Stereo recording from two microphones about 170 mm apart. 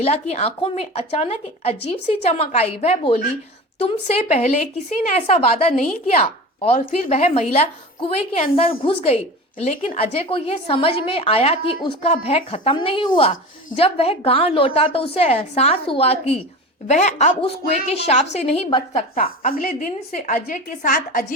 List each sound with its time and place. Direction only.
0.0 s a woman's voice: 40° left (ahead or behind)
6.7 s a woman's voice: 40° left (ahead or behind)
9.6 s a woman's voice: 45° left (ahead or behind)
19.1 s a woman's voice: 55° left (ahead or behind)